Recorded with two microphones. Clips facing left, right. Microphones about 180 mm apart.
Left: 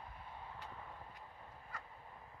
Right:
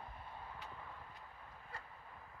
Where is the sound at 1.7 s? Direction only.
30° right (ahead or behind).